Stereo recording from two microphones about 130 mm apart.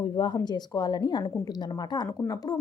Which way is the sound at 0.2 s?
35° left (ahead or behind).